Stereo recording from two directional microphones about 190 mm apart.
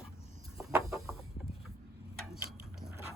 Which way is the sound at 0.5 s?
15° right (ahead or behind).